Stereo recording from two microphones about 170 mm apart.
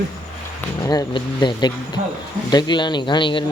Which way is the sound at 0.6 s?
20° left (ahead or behind).